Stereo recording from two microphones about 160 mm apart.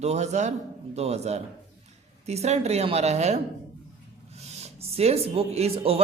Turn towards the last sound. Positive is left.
turn(degrees=-40)  # may be behind; listen again after turning